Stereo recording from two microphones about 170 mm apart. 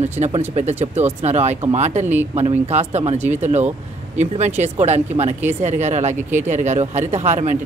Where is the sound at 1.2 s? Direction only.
40° right (ahead or behind).